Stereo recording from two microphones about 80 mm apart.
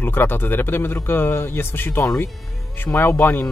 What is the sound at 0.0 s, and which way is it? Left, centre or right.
Speech, left.